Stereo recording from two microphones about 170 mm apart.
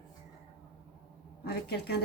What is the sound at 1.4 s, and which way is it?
Speech, 70° left (ahead or behind).